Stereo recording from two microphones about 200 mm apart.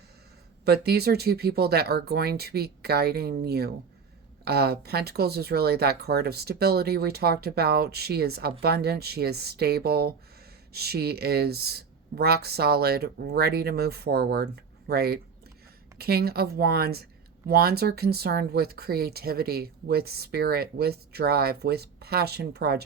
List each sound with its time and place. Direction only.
0.6 s speech: 50° right (ahead or behind)